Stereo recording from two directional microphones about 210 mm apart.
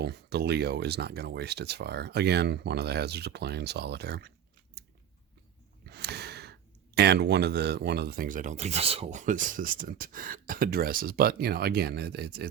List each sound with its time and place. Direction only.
0.0 s speech: 50° right (ahead or behind)
4.8 s biting: 50° right (ahead or behind)
5.9 s speech: 50° right (ahead or behind)